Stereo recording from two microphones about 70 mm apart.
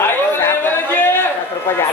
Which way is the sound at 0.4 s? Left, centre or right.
Left.